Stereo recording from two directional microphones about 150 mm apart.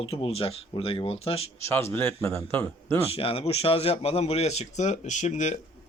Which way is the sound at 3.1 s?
40° left (ahead or behind).